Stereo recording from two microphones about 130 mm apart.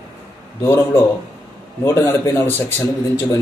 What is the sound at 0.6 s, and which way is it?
Speech, 20° left (ahead or behind).